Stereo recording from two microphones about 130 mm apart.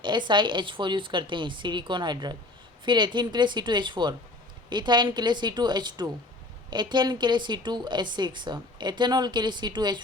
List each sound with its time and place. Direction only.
0.0 s a woman's voice: 35° right (ahead or behind)